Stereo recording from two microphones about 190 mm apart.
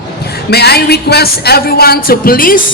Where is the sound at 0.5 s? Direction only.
55° left (ahead or behind).